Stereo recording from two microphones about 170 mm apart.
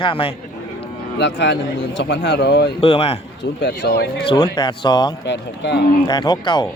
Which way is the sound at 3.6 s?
75° left (ahead or behind).